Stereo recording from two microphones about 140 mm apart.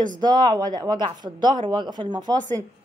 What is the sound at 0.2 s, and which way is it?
Speech, 30° right (ahead or behind).